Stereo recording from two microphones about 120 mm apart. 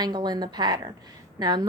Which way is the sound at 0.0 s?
35° right (ahead or behind).